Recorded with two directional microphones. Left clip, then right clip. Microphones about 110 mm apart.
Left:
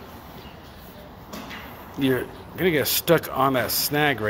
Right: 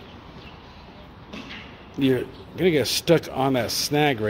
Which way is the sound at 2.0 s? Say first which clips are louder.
Right 1 dB; 75° right (ahead or behind).